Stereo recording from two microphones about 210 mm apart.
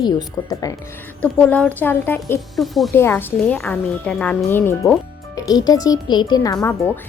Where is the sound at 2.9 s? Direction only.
10° left (ahead or behind).